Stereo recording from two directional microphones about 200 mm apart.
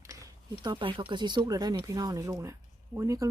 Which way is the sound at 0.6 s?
25° right (ahead or behind).